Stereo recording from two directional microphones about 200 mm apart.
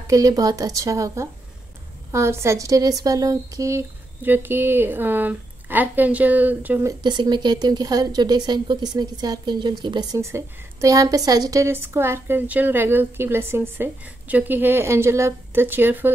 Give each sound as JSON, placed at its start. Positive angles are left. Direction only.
{"t": 0.0, "sound": "speech", "side_deg": -15}